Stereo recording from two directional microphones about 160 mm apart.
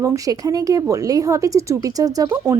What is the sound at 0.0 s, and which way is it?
Speech, 20° right (ahead or behind).